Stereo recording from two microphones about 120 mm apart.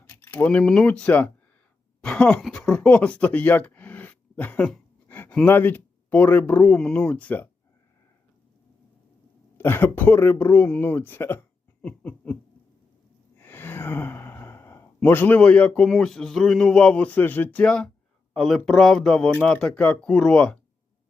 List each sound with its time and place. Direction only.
0.0 s speech: 15° left (ahead or behind)
9.6 s speech: 20° left (ahead or behind)
11.8 s laughter: 15° left (ahead or behind)
13.4 s speech: 15° left (ahead or behind)